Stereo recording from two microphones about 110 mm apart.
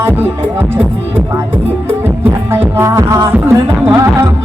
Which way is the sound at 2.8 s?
25° right (ahead or behind).